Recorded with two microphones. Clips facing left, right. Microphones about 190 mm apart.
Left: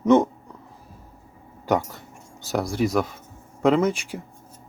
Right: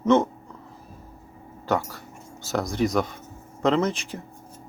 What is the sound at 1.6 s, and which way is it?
Speech, 15° left (ahead or behind).